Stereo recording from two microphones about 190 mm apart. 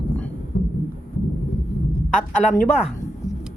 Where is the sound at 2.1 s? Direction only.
40° left (ahead or behind).